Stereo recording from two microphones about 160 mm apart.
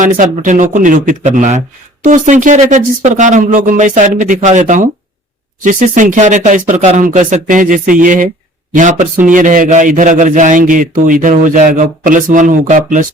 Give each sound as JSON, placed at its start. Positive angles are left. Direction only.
{"t": 0.0, "sound": "a man's voice", "side_deg": -55}